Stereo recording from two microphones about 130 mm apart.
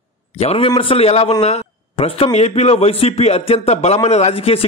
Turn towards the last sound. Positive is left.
turn(degrees=50)  # may be behind; listen again after turning